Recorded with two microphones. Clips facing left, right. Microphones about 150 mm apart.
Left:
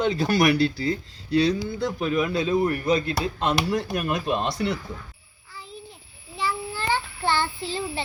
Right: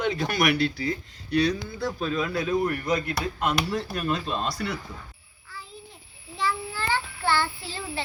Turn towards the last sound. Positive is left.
turn(degrees=20)  # may be behind; listen again after turning